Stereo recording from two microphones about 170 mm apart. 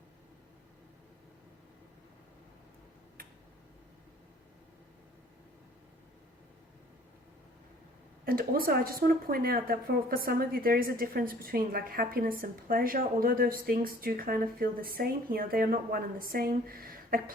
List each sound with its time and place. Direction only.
8.2 s speech: 60° right (ahead or behind)